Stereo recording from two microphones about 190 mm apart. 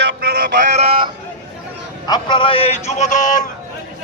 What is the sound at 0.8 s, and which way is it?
Speech, 25° right (ahead or behind).